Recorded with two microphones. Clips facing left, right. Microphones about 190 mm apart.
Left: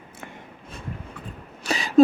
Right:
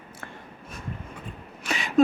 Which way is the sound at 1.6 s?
35° left (ahead or behind).